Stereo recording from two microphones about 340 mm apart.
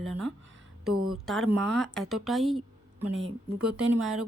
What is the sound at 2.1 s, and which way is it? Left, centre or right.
Speech, centre.